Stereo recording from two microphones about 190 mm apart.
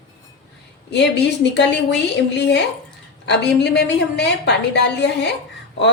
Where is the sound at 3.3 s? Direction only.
65° left (ahead or behind).